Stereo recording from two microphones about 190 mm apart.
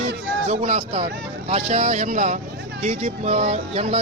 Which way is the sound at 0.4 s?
35° right (ahead or behind).